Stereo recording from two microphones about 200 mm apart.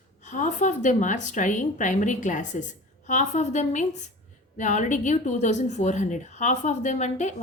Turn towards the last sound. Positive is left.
turn(degrees=35)  # may be behind; listen again after turning